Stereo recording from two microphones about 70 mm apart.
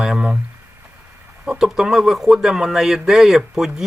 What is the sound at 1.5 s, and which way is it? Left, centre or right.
Speech, centre.